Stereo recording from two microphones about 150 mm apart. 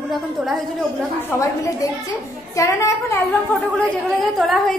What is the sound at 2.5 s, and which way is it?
Speech, 20° left (ahead or behind).